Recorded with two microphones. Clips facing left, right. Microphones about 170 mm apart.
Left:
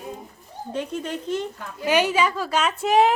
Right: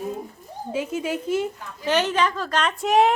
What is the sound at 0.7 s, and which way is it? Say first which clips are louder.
Speech: right 2 dB; 5° right (ahead or behind).